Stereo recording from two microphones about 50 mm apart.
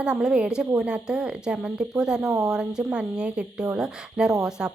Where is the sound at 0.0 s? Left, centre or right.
Centre.